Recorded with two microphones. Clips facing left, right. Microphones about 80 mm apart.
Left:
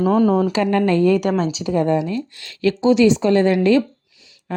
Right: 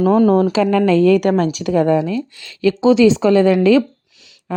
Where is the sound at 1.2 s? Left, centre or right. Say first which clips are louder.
Right 4 dB; right.